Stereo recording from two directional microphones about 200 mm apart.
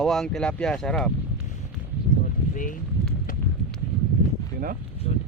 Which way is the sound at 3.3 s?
40° left (ahead or behind).